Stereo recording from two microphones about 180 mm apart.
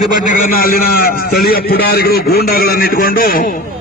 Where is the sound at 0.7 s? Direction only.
55° left (ahead or behind).